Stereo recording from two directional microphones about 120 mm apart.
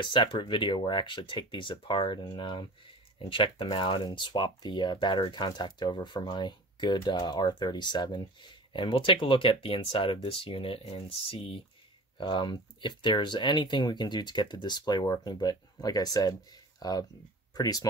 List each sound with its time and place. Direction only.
0.0 s speech: 45° left (ahead or behind)